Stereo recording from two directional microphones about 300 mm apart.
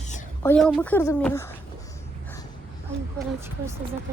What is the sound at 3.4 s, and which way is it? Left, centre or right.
Speech, centre.